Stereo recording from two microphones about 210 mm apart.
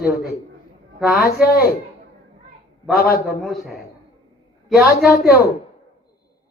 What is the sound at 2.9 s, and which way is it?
Speech, 45° left (ahead or behind).